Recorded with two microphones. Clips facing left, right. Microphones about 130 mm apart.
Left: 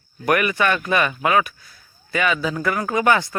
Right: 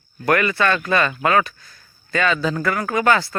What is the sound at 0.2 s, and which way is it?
Speech, 15° left (ahead or behind).